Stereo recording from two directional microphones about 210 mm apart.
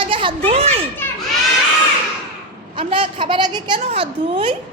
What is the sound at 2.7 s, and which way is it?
A woman's voice, 25° right (ahead or behind).